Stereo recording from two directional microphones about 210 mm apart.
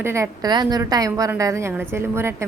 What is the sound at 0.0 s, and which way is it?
A woman's voice, 15° right (ahead or behind).